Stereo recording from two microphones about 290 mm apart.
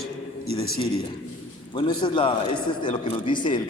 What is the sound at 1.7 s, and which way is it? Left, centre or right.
Speech, centre.